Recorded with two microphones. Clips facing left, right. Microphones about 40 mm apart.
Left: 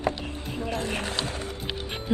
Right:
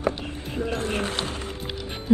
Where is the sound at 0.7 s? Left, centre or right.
Right.